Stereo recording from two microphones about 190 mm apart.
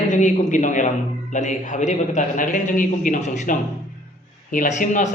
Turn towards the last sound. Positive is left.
turn(degrees=40)  # may be behind; listen again after turning